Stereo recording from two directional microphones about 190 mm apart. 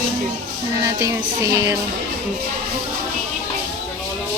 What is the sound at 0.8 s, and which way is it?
Music, 15° right (ahead or behind).